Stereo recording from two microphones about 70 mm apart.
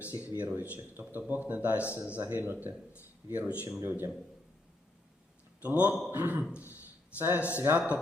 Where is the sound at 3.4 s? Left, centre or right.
Centre.